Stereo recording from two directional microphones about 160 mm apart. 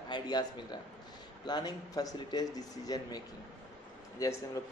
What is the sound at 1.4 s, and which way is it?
A man's voice, 25° left (ahead or behind).